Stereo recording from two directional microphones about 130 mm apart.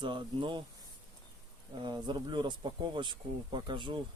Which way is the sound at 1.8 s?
35° right (ahead or behind).